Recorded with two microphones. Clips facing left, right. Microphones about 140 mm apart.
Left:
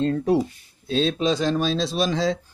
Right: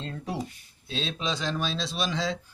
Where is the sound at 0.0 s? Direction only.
50° left (ahead or behind).